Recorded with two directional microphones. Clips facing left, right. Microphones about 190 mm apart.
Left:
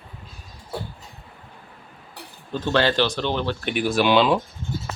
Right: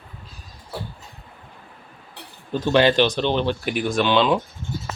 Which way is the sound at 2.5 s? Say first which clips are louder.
Right 4 dB; 15° right (ahead or behind).